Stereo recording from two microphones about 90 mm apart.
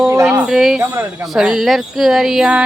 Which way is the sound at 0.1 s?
30° right (ahead or behind).